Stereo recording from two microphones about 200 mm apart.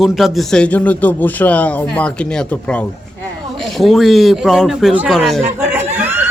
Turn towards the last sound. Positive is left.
turn(degrees=-10)  # may be behind; listen again after turning